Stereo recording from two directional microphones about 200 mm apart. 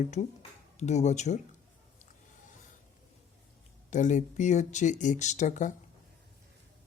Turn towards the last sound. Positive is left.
turn(degrees=40)  # may be behind; listen again after turning